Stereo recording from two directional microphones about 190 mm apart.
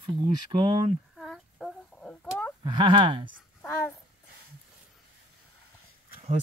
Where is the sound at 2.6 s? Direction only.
25° right (ahead or behind).